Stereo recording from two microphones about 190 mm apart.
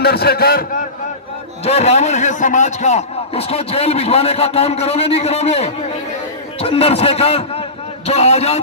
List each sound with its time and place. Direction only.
0.0 s a man's voice: 55° left (ahead or behind)
1.6 s a man's voice: 35° left (ahead or behind)